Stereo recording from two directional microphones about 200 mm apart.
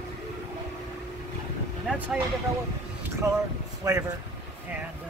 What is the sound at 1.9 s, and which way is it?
Speech, 10° right (ahead or behind).